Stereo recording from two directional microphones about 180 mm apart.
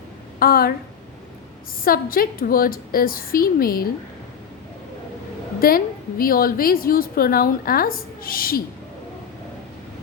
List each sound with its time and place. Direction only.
0.3 s a woman's voice: 55° left (ahead or behind)
1.8 s a woman's voice: 55° left (ahead or behind)
5.5 s a woman's voice: 55° left (ahead or behind)